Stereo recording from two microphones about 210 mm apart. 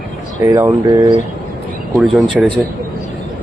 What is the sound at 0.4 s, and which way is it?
Speech, 15° right (ahead or behind).